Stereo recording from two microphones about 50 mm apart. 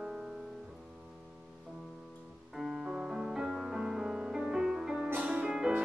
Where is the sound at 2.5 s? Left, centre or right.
Centre.